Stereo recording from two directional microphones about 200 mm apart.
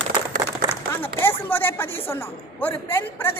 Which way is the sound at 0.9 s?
10° left (ahead or behind).